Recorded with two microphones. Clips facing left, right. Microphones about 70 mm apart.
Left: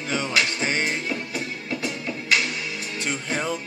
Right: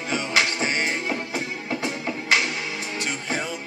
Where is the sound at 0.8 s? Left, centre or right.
Right.